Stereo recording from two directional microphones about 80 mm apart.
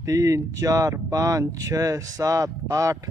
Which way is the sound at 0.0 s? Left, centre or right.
Right.